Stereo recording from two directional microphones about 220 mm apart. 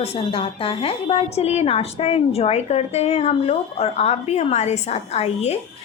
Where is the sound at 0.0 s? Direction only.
25° left (ahead or behind).